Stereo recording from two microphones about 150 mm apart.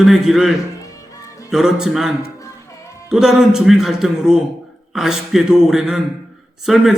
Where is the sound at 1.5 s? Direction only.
Centre (ahead or behind).